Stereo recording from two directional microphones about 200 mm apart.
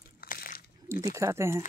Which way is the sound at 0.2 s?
45° left (ahead or behind).